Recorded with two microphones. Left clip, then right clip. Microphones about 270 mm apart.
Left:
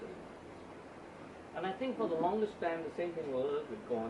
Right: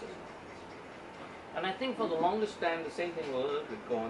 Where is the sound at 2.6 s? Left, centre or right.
Centre.